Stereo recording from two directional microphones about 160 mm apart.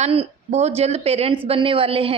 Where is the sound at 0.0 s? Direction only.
45° right (ahead or behind).